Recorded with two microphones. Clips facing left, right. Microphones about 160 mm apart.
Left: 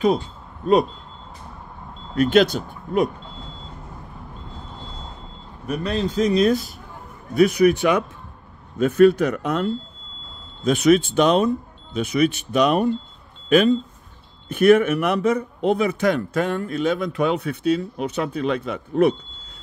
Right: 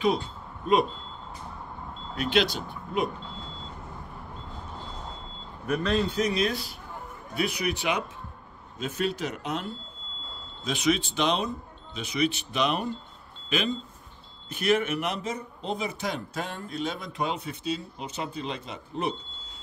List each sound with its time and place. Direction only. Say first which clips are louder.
2.1 s speech: left 9 dB; 45° left (ahead or behind)
5.7 s a man's voice: left 1 dB; 15° left (ahead or behind)
6.1 s speech: left 8 dB; 30° left (ahead or behind)
6.4 s a man's voice: left 10 dB; 45° left (ahead or behind); by 19.1 s 60° left (ahead or behind)